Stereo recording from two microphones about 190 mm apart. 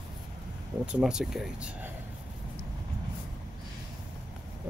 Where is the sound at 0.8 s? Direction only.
5° right (ahead or behind).